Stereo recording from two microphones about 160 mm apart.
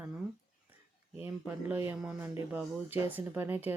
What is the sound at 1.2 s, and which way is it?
Speech, 15° right (ahead or behind).